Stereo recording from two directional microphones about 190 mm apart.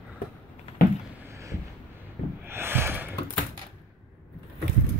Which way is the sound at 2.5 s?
10° right (ahead or behind).